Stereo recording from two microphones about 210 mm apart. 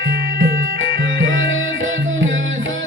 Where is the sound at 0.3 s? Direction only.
70° right (ahead or behind).